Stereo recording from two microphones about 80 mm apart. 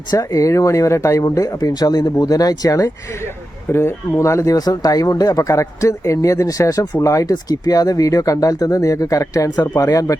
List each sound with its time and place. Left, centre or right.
0.1 s speech: left
3.7 s a man's voice: left